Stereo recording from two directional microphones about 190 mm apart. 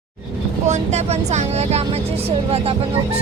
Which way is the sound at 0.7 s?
35° right (ahead or behind).